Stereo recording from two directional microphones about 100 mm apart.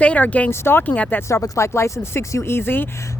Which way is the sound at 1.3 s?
30° left (ahead or behind).